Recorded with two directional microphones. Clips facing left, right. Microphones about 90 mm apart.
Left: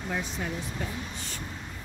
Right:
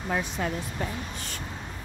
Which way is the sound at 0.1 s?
60° right (ahead or behind).